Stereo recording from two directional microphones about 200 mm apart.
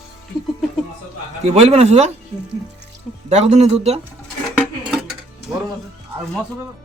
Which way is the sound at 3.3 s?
35° right (ahead or behind).